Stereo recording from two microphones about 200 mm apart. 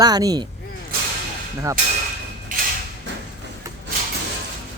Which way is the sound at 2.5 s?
40° right (ahead or behind).